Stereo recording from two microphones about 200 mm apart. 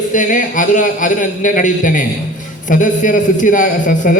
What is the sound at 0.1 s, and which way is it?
A man's voice, 40° left (ahead or behind).